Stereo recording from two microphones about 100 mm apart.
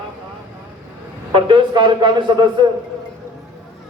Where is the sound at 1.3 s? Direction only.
55° right (ahead or behind).